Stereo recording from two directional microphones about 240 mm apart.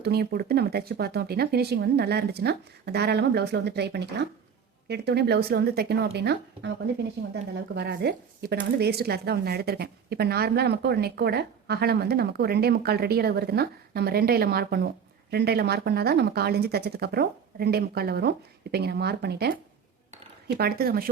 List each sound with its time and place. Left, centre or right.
0.0 s speech: right
7.8 s speech: right